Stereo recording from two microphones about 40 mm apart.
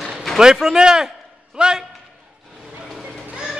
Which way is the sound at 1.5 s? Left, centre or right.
Right.